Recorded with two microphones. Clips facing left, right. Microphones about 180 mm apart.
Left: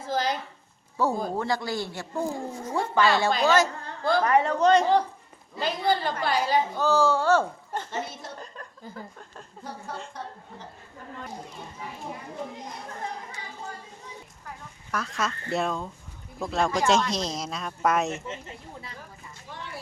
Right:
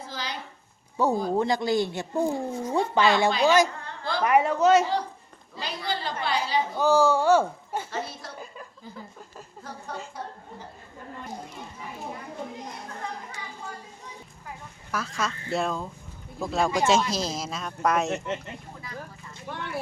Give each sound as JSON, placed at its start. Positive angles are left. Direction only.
{"t": 0.0, "sound": "a sound", "side_deg": 50}
{"t": 1.0, "sound": "speech", "side_deg": -20}
{"t": 5.5, "sound": "a woman's voice", "side_deg": 50}
{"t": 6.7, "sound": "speech", "side_deg": -10}
{"t": 7.9, "sound": "a sound", "side_deg": 20}
{"t": 14.4, "sound": "speech", "side_deg": 0}
{"t": 19.5, "sound": "clip-clop", "side_deg": -65}